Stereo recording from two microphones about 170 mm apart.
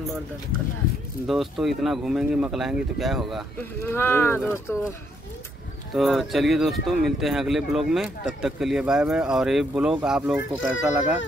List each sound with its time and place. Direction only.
1.2 s speech: centre (ahead or behind)
3.9 s speech: 15° left (ahead or behind)
5.9 s speech: centre (ahead or behind)